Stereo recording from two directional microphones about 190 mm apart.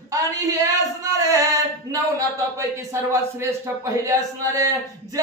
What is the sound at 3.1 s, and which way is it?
Speech, 15° right (ahead or behind).